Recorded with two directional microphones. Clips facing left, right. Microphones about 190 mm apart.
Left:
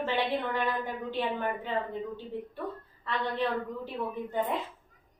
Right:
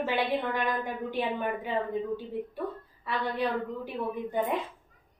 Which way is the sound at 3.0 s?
10° right (ahead or behind).